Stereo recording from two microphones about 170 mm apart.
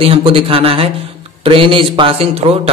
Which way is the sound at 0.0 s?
35° right (ahead or behind).